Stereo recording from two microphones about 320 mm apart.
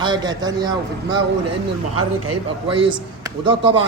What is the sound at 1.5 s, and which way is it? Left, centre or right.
Speech, right.